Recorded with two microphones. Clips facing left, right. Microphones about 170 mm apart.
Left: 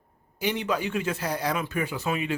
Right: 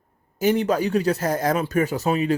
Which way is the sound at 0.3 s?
45° right (ahead or behind).